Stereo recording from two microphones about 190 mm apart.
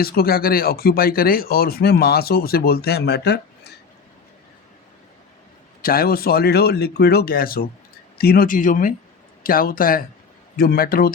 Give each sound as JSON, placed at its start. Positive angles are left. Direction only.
{"t": 0.0, "sound": "speech", "side_deg": 55}
{"t": 5.8, "sound": "speech", "side_deg": 50}